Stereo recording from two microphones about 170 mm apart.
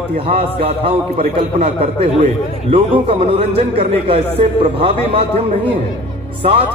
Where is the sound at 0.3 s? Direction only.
35° right (ahead or behind).